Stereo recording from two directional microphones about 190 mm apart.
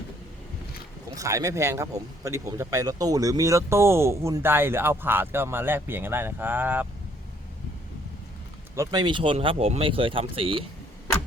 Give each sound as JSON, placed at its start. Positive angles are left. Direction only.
{"t": 1.1, "sound": "speech", "side_deg": -15}
{"t": 8.7, "sound": "speech", "side_deg": -20}